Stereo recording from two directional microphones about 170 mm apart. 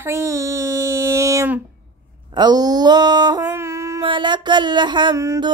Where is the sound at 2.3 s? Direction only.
25° right (ahead or behind).